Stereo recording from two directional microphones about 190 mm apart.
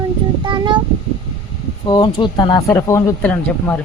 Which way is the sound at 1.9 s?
25° left (ahead or behind).